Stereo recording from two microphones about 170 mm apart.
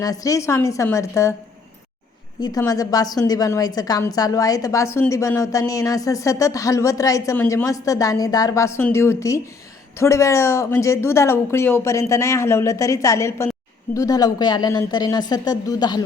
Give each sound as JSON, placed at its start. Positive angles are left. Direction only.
{"t": 0.0, "sound": "speech", "side_deg": 20}
{"t": 2.4, "sound": "a woman's voice", "side_deg": 20}